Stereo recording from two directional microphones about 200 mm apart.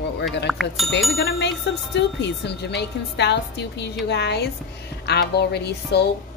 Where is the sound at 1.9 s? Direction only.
60° left (ahead or behind).